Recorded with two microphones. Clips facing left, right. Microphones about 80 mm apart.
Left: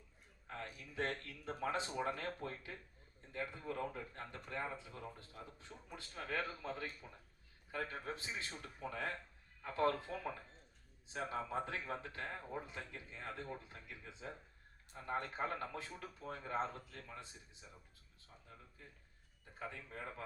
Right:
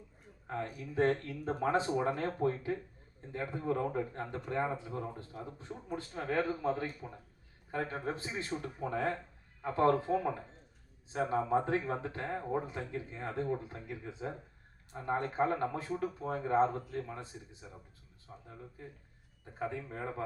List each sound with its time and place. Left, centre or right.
0.4 s speech: right
19.5 s speech: right